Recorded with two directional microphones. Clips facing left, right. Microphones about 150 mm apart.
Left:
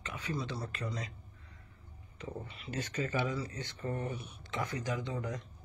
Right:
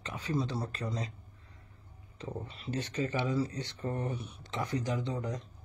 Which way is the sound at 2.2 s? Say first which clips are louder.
Right 2 dB; 35° right (ahead or behind).